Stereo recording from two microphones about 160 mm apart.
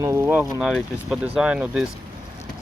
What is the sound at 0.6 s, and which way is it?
Speech, centre (ahead or behind).